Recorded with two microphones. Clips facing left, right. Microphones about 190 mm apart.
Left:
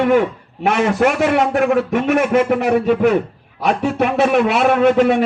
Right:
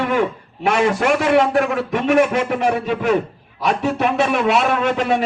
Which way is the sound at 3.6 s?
50° left (ahead or behind).